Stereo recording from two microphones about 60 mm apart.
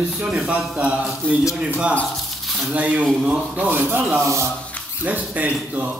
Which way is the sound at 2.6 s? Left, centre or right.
Right.